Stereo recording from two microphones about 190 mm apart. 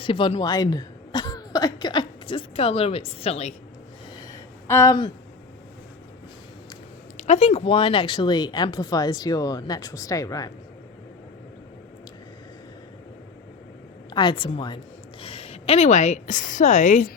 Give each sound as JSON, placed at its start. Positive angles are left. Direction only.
{"t": 0.0, "sound": "speech", "side_deg": 25}
{"t": 4.7, "sound": "speech", "side_deg": 15}
{"t": 7.2, "sound": "speech", "side_deg": 35}
{"t": 14.1, "sound": "a woman's voice", "side_deg": 25}